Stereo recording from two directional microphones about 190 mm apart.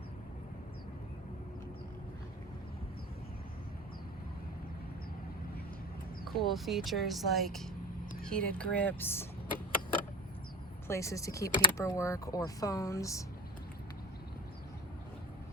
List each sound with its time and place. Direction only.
6.2 s speech: centre (ahead or behind)
10.8 s speech: 15° left (ahead or behind)